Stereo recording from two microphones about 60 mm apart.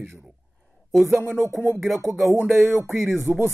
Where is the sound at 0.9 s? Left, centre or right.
Centre.